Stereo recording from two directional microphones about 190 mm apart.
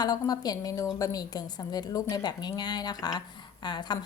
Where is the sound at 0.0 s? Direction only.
20° left (ahead or behind).